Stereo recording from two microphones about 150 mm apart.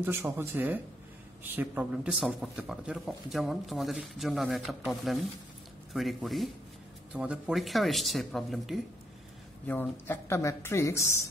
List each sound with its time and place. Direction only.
0.0 s speech: 15° right (ahead or behind)
9.7 s speech: 15° left (ahead or behind)